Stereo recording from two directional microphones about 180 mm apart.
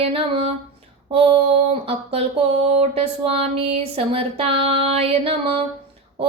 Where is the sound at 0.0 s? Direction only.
30° right (ahead or behind).